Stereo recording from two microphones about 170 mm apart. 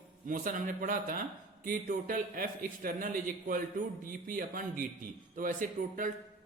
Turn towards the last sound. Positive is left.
turn(degrees=-50)  # may be behind; listen again after turning